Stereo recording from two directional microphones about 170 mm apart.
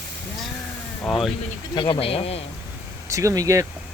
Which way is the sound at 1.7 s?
30° left (ahead or behind).